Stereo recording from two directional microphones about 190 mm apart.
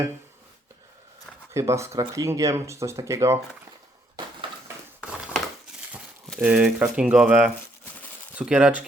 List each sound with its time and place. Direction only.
1.5 s speech: 15° right (ahead or behind)
6.3 s speech: 5° right (ahead or behind)